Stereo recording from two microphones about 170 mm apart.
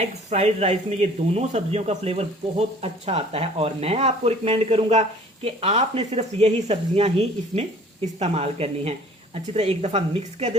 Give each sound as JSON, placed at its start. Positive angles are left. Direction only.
{"t": 0.3, "sound": "speech", "side_deg": -40}